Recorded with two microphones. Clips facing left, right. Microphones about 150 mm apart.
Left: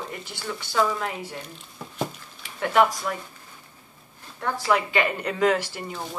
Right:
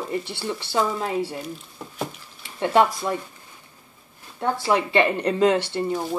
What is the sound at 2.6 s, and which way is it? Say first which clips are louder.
Speech: right 2 dB; 30° right (ahead or behind).